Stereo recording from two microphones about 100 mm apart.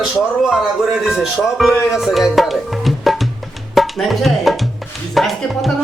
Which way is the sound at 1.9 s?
Centre (ahead or behind).